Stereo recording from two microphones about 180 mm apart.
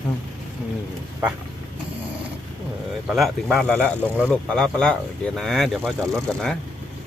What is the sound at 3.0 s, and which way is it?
Speech, centre (ahead or behind).